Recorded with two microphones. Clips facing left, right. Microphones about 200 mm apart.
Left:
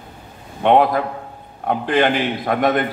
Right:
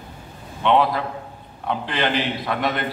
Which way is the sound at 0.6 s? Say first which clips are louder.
Left 4 dB; 50° left (ahead or behind).